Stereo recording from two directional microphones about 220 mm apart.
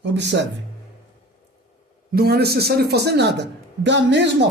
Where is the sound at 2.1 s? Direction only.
45° right (ahead or behind).